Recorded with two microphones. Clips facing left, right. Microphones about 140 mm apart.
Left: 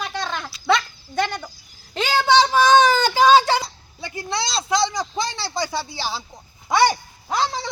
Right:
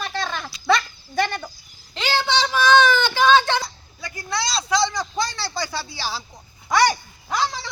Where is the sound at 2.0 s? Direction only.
45° left (ahead or behind); by 6.2 s 20° left (ahead or behind).